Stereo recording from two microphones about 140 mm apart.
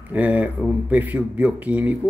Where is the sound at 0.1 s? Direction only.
10° right (ahead or behind).